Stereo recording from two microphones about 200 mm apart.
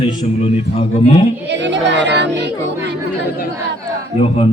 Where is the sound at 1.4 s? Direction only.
60° right (ahead or behind).